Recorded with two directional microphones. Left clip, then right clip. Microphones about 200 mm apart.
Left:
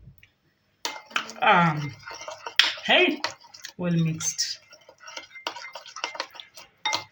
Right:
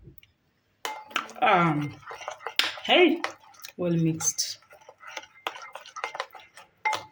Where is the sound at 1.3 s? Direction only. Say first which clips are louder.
Left 2 dB; 50° right (ahead or behind).